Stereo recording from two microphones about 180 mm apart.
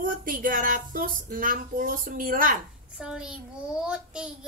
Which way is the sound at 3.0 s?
5° right (ahead or behind).